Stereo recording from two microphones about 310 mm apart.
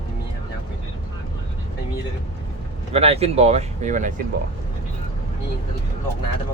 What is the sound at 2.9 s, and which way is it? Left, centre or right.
Speech, centre.